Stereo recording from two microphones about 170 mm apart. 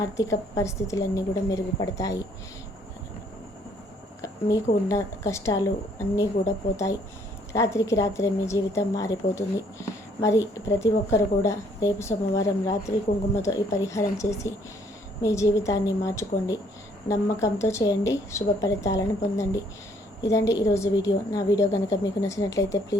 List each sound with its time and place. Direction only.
0.2 s a woman's voice: 20° left (ahead or behind)
4.2 s a sound: 20° left (ahead or behind)
4.9 s a woman's voice: 20° left (ahead or behind)